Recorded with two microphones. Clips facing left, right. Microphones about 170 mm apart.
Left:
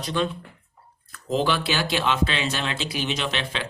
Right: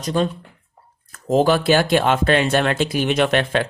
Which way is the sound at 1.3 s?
45° right (ahead or behind).